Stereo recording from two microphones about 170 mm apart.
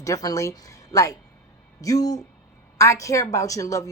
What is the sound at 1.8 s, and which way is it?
Speech, 20° left (ahead or behind).